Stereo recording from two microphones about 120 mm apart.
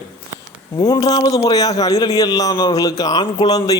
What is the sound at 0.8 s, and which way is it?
Speech, 30° left (ahead or behind).